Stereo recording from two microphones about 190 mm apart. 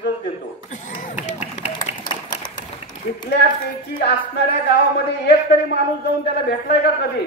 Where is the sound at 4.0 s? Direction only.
60° left (ahead or behind).